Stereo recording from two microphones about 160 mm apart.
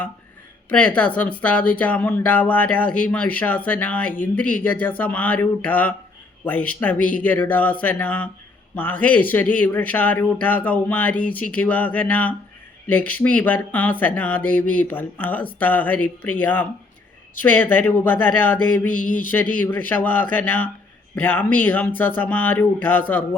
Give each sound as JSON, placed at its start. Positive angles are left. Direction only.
{"t": 0.7, "sound": "speech", "side_deg": 10}
{"t": 18.9, "sound": "a sound", "side_deg": 55}
{"t": 19.5, "sound": "speech", "side_deg": 10}